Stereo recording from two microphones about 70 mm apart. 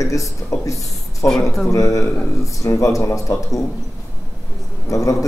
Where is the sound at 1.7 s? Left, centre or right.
Left.